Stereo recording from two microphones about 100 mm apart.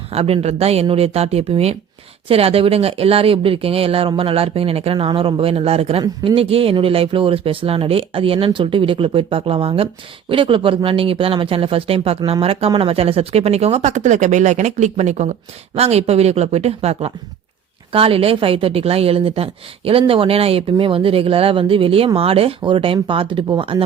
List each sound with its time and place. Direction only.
0.1 s speech: 90° right
6.0 s speech: 65° right (ahead or behind); by 13.8 s 90° right
14.9 s speech: 90° right
17.9 s speech: 70° right (ahead or behind)